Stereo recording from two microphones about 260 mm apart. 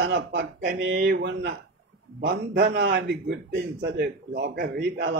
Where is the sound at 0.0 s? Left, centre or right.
Right.